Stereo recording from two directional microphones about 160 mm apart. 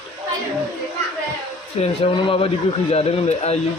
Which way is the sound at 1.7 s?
40° left (ahead or behind).